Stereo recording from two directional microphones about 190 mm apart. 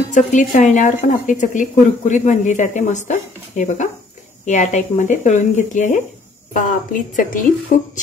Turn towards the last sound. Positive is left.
turn(degrees=45)  # may be behind; listen again after turning